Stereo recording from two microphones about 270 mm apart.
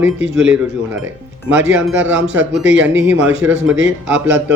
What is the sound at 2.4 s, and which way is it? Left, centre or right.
Speech, right.